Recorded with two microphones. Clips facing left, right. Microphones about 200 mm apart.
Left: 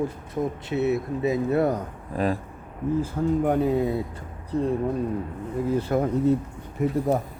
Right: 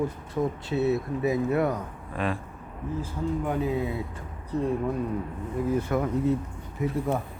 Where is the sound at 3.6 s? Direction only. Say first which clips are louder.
Left 5 dB; 40° left (ahead or behind).